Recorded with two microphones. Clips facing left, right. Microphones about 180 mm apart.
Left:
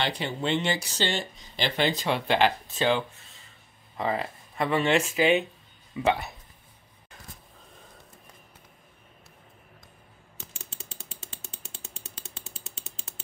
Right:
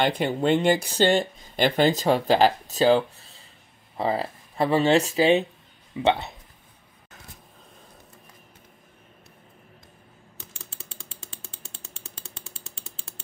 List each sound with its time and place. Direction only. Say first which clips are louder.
0.0 s speech: right 7 dB; 50° right (ahead or behind); by 6.3 s 25° right (ahead or behind)